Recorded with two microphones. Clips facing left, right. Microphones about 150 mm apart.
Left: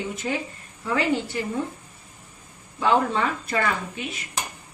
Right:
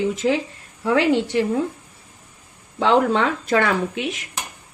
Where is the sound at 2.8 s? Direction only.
90° right.